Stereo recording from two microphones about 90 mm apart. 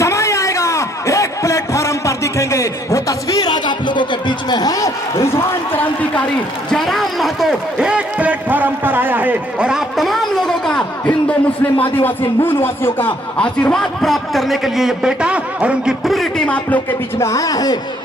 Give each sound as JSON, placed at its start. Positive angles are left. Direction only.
{"t": 0.0, "sound": "a sound", "side_deg": 35}
{"t": 6.7, "sound": "a sound", "side_deg": 5}
{"t": 13.3, "sound": "a man's voice", "side_deg": 10}
{"t": 16.0, "sound": "speech", "side_deg": 0}
{"t": 16.5, "sound": "speech", "side_deg": 15}
{"t": 17.2, "sound": "speech", "side_deg": 35}